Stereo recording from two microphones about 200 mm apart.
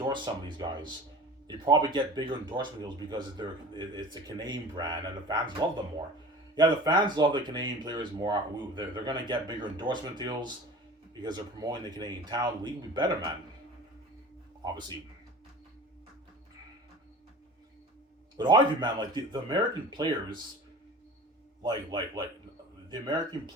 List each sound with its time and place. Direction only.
0.0 s speech: 25° right (ahead or behind)
14.6 s speech: 20° right (ahead or behind)
18.3 s speech: 20° right (ahead or behind)
21.6 s speech: 20° right (ahead or behind)